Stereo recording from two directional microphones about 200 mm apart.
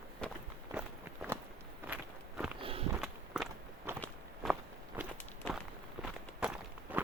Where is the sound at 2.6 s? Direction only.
30° right (ahead or behind).